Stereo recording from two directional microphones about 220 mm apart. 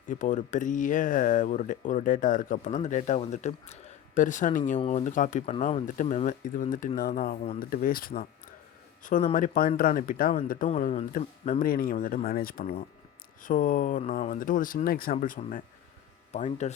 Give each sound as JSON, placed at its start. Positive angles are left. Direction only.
{"t": 0.1, "sound": "speech", "side_deg": 35}
{"t": 9.3, "sound": "speech", "side_deg": 40}